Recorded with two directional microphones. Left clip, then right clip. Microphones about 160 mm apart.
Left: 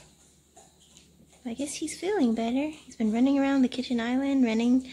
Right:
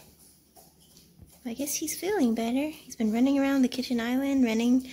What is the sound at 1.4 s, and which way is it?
Speech, centre (ahead or behind).